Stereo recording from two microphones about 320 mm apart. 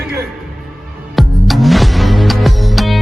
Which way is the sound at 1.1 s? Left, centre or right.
Centre.